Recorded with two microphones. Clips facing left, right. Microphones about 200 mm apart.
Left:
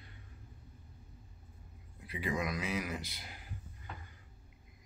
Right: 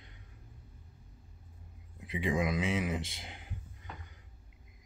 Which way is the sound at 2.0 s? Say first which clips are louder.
Right 5 dB; 25° right (ahead or behind).